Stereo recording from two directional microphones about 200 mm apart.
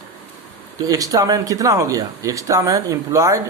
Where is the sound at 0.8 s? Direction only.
15° right (ahead or behind).